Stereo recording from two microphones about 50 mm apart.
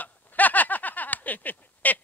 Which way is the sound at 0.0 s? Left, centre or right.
Left.